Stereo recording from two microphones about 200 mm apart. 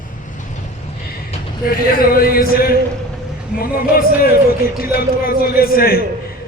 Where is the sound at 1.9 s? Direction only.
45° left (ahead or behind).